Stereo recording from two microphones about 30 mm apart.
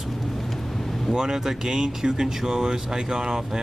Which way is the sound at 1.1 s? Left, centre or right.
Right.